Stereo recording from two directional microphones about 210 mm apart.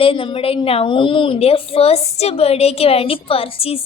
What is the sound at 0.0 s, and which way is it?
A woman's voice, 25° left (ahead or behind).